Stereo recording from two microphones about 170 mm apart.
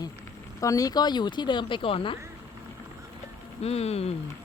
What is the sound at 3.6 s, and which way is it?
Speech, 35° left (ahead or behind).